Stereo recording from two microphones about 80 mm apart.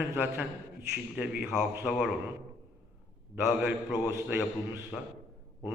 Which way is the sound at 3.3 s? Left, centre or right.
Centre.